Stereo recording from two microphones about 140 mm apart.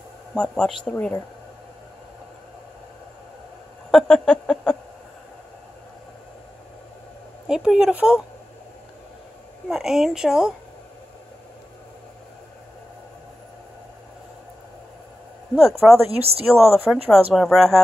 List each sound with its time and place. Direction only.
0.3 s speech: 5° left (ahead or behind)
3.9 s speech: 5° left (ahead or behind)
7.4 s speech: 5° right (ahead or behind)
9.7 s speech: centre (ahead or behind)
16.1 s speech: 45° right (ahead or behind)
16.5 s speech: centre (ahead or behind)